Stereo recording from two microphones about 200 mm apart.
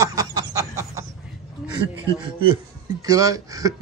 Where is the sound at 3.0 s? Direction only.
15° right (ahead or behind).